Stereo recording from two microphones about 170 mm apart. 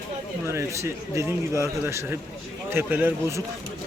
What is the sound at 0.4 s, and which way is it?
A man's voice, 15° right (ahead or behind).